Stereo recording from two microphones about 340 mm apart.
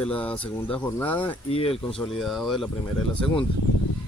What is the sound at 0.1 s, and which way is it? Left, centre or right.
Speech, centre.